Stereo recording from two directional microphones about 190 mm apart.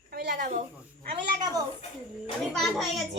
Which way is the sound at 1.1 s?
20° right (ahead or behind).